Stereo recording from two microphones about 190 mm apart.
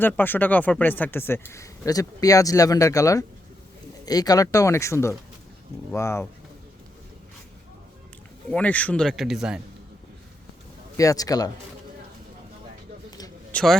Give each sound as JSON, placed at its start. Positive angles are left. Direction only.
{"t": 0.0, "sound": "speech", "side_deg": 10}
{"t": 8.4, "sound": "a man's voice", "side_deg": 5}
{"t": 10.9, "sound": "speech", "side_deg": 15}
{"t": 13.1, "sound": "a sound", "side_deg": 20}
{"t": 13.5, "sound": "a man's voice", "side_deg": 5}